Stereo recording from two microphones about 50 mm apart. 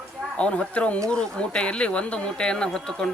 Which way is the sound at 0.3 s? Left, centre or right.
Left.